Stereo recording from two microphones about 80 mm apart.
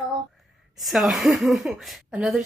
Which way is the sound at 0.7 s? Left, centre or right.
Centre.